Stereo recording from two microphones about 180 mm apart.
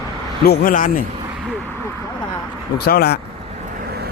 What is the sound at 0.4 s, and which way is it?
Speech, 60° left (ahead or behind).